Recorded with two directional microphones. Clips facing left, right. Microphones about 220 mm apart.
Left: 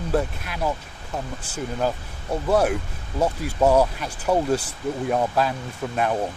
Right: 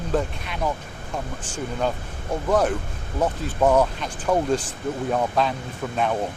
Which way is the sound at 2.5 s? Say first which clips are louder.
Left 1 dB; 10° left (ahead or behind).